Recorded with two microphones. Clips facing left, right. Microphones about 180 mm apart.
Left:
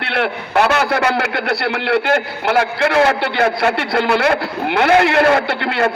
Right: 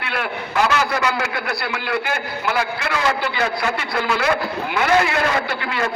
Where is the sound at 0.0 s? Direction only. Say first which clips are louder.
Left 5 dB; 70° left (ahead or behind).